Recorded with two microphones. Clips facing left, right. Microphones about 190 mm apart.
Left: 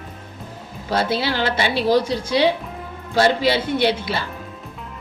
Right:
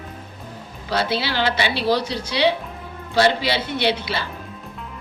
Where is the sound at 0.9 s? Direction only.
50° left (ahead or behind).